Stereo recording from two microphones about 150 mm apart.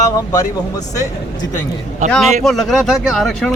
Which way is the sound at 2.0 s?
50° right (ahead or behind).